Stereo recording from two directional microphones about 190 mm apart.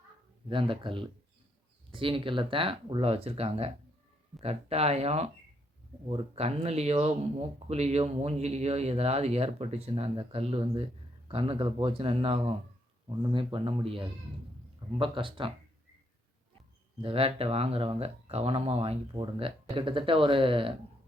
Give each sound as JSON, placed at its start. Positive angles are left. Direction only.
{"t": 0.4, "sound": "speech", "side_deg": -25}
{"t": 17.0, "sound": "speech", "side_deg": -30}